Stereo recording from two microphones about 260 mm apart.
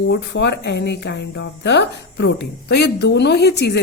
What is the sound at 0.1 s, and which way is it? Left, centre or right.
Speech, left.